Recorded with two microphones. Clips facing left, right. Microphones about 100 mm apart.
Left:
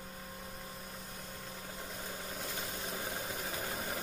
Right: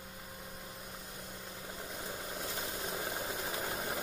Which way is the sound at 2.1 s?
15° right (ahead or behind).